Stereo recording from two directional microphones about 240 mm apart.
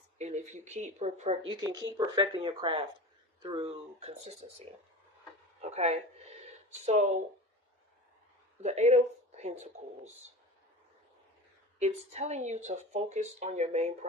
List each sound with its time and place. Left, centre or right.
0.2 s speech: right
1.5 s speech: centre
5.6 s speech: right
8.6 s speech: right
11.8 s speech: right